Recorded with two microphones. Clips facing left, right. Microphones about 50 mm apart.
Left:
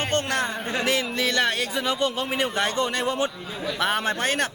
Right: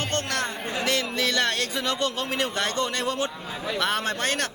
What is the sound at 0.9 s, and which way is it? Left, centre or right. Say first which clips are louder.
A man's voice: even; centre.